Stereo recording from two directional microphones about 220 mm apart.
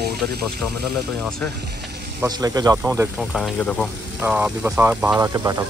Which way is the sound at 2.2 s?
15° right (ahead or behind).